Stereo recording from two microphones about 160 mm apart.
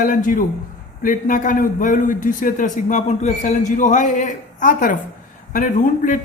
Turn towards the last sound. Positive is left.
turn(degrees=55)  # may be behind; listen again after turning